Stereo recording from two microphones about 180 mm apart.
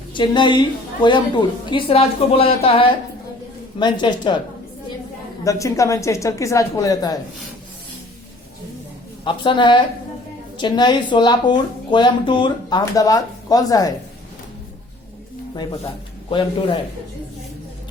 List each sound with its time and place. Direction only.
0.1 s a woman's voice: 25° left (ahead or behind)
5.5 s speech: 15° left (ahead or behind)
9.2 s a woman's voice: 25° left (ahead or behind)
16.3 s a woman's voice: 30° left (ahead or behind)